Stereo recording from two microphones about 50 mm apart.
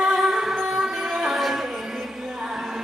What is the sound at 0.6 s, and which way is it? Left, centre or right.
Music, centre.